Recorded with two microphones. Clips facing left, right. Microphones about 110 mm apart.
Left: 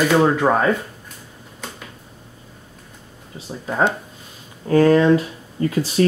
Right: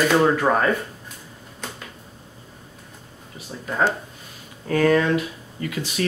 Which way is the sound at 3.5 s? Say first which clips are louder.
Left 3 dB; 20° left (ahead or behind).